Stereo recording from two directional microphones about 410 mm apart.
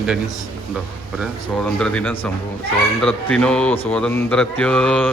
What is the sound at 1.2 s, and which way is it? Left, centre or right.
Speech, centre.